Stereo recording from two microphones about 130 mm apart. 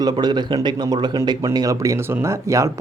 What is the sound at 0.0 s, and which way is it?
A man's voice, 30° right (ahead or behind).